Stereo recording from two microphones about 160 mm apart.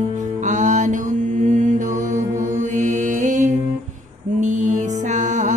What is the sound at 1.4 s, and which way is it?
Mantra, 50° right (ahead or behind).